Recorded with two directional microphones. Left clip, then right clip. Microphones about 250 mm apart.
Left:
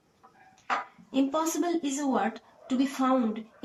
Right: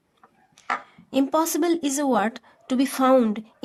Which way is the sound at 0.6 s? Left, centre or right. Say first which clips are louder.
Right 4 dB; right.